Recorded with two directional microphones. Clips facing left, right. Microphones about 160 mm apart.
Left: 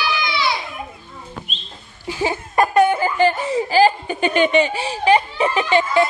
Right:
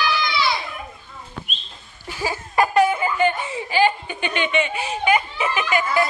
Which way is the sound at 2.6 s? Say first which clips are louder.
Left 2 dB; 30° left (ahead or behind).